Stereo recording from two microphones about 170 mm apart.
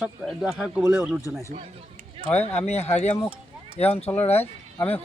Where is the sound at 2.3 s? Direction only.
40° left (ahead or behind).